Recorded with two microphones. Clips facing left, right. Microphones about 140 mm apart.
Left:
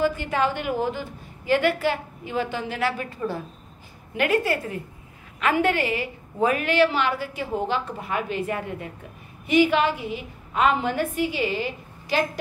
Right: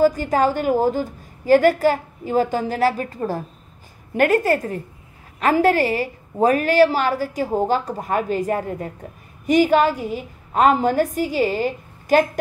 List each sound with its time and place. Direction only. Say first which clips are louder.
0.0 s a woman's voice: right 6 dB; 40° right (ahead or behind)